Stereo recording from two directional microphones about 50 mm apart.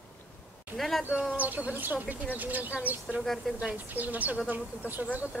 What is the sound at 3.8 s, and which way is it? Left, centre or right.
Speech, right.